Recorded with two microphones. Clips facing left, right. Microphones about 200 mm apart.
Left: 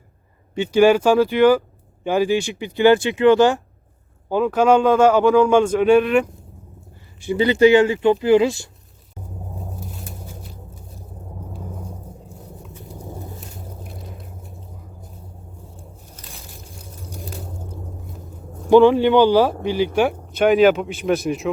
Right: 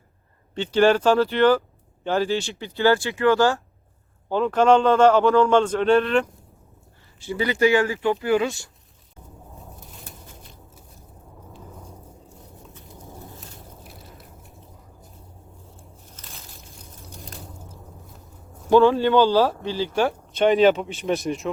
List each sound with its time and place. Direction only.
0.5 s a man's voice: 10° left (ahead or behind)
4.3 s a man's voice: 10° left (ahead or behind); by 8.7 s 25° left (ahead or behind)
18.7 s a man's voice: 15° left (ahead or behind); by 21.5 s centre (ahead or behind)